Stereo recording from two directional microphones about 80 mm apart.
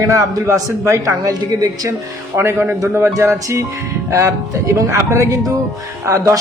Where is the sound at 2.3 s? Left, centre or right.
Right.